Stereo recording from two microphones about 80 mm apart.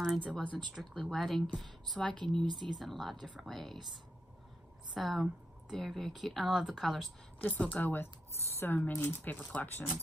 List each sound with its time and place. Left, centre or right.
0.3 s speech: centre
1.0 s speech: centre
7.4 s speech: left